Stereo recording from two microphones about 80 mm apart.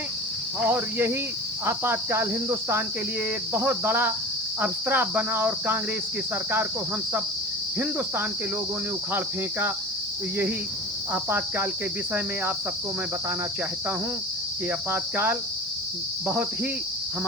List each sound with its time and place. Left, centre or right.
0.6 s cricket: right
9.1 s cricket: right
11.1 s cricket: right
14.7 s cricket: right